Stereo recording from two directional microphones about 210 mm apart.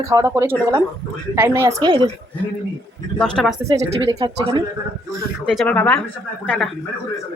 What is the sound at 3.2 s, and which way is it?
Speech, 5° left (ahead or behind).